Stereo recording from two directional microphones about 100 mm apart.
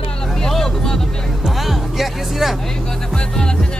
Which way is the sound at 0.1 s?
5° left (ahead or behind).